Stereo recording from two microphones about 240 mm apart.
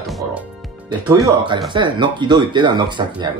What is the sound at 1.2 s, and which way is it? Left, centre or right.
Speech, centre.